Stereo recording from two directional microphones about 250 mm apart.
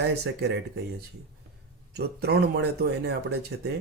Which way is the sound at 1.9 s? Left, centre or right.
Right.